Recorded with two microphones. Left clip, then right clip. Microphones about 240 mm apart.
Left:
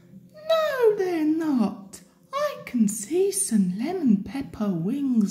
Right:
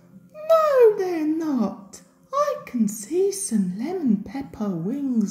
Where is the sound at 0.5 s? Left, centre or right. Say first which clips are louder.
Right 5 dB; centre.